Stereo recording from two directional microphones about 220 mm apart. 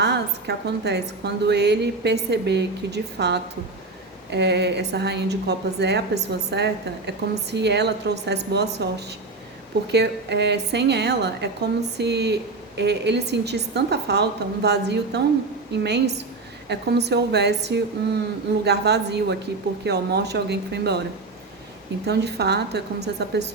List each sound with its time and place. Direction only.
0.0 s a woman's voice: 50° right (ahead or behind)
22.0 s a woman's voice: 50° right (ahead or behind)